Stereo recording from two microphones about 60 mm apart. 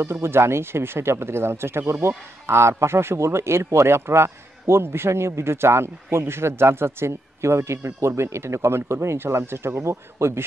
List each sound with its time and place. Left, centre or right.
0.0 s speech: right